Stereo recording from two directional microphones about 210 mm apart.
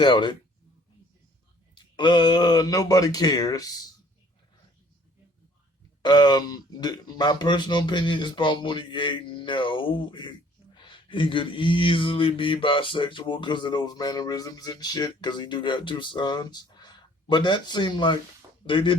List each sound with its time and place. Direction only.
0.0 s mantra: 20° left (ahead or behind)
1.7 s speech: 20° left (ahead or behind)
6.0 s mantra: 20° left (ahead or behind)